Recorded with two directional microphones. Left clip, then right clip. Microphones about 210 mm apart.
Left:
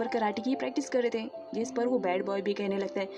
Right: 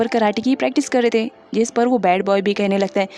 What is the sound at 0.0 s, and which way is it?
Speech, 45° right (ahead or behind).